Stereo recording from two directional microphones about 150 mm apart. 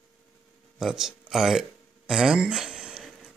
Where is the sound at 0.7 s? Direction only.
5° right (ahead or behind).